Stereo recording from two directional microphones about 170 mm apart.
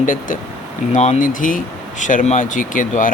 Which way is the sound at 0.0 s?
50° left (ahead or behind).